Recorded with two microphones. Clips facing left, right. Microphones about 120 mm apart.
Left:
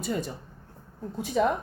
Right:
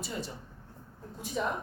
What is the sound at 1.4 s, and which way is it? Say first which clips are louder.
Speech: left 9 dB; 90° left.